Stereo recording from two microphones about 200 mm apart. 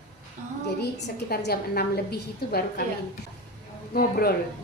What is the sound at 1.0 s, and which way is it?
A woman's voice, 55° left (ahead or behind).